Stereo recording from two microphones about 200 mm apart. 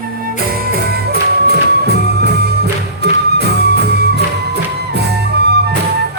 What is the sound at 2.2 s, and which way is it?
Music, 55° right (ahead or behind).